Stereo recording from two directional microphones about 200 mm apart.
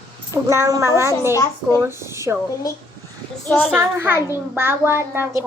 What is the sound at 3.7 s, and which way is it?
A child's voice, 10° right (ahead or behind).